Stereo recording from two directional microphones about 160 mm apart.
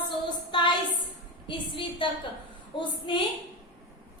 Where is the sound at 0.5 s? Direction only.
30° left (ahead or behind).